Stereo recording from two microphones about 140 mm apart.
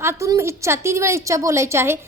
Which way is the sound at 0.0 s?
20° right (ahead or behind).